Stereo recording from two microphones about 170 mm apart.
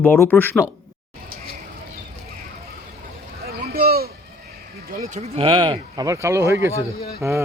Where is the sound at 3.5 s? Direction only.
65° right (ahead or behind).